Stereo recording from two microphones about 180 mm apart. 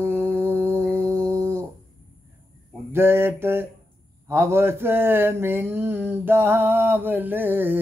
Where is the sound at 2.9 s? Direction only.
15° right (ahead or behind).